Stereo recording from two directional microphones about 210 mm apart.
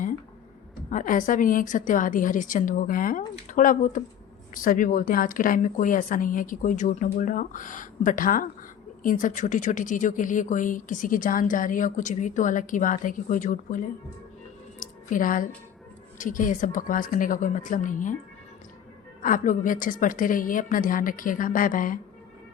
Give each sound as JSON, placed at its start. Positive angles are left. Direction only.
{"t": 0.9, "sound": "speech", "side_deg": 40}
{"t": 14.8, "sound": "a sound", "side_deg": 40}
{"t": 16.1, "sound": "speech", "side_deg": 40}
{"t": 19.2, "sound": "speech", "side_deg": 40}